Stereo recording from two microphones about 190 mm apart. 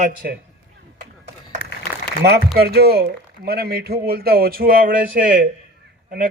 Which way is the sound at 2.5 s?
55° right (ahead or behind).